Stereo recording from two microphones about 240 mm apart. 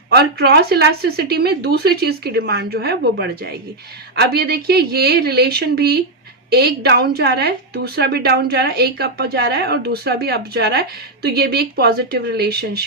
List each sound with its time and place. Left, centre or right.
0.2 s a woman's voice: right